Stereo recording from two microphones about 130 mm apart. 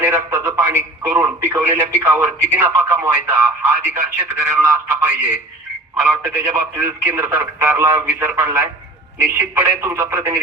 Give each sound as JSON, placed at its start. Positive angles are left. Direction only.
{"t": 0.0, "sound": "speech", "side_deg": -20}
{"t": 6.3, "sound": "speech", "side_deg": -20}